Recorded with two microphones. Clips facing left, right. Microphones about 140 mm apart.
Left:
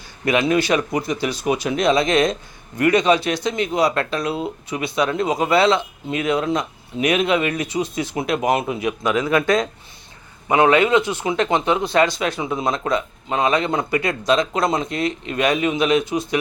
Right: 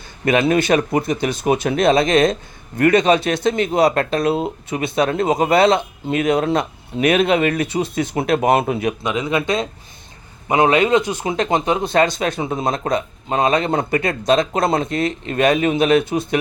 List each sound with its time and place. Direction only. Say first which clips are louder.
0.3 s speech: right 2 dB; 50° right (ahead or behind)
9.0 s a man's voice: left 4 dB; 20° right (ahead or behind); by 11.8 s 40° right (ahead or behind)
11.9 s speech: right 1 dB; 50° right (ahead or behind)